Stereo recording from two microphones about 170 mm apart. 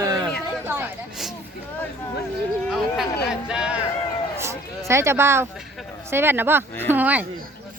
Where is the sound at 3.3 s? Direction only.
5° right (ahead or behind).